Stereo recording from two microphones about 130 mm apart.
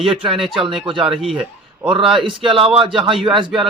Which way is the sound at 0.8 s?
40° right (ahead or behind).